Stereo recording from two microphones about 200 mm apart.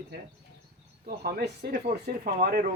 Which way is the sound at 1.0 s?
50° right (ahead or behind).